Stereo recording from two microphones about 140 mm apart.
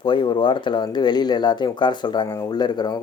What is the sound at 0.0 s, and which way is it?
Speech, 35° left (ahead or behind).